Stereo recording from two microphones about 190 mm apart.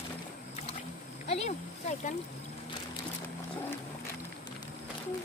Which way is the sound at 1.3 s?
35° left (ahead or behind).